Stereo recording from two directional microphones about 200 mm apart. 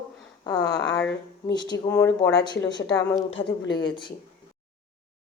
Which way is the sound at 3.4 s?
40° left (ahead or behind).